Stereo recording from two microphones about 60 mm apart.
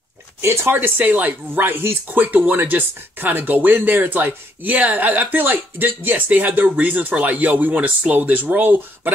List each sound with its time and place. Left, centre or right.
0.4 s speech: right
2.0 s speech: right